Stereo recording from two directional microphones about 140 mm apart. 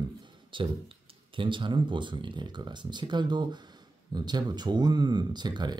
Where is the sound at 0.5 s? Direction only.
35° right (ahead or behind).